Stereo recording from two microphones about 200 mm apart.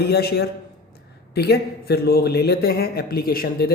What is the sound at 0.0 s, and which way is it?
A man's voice, 50° left (ahead or behind).